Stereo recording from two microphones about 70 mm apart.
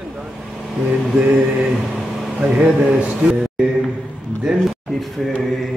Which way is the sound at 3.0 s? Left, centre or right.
Centre.